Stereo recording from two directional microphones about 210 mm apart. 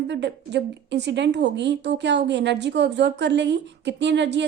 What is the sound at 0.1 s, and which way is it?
A woman's voice, 55° right (ahead or behind).